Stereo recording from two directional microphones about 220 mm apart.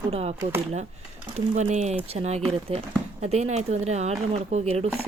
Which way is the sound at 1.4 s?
30° right (ahead or behind).